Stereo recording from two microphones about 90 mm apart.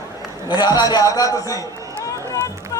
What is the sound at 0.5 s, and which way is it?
Speech, 50° left (ahead or behind).